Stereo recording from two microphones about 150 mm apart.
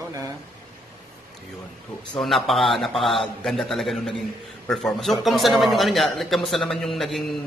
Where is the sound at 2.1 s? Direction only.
Centre (ahead or behind).